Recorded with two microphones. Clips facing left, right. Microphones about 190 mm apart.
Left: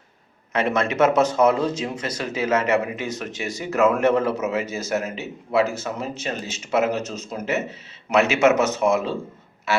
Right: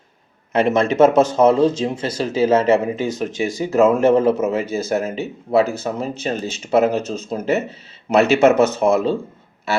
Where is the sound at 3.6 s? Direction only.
30° right (ahead or behind).